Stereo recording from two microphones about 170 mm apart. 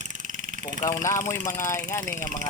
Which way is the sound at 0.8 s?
15° left (ahead or behind).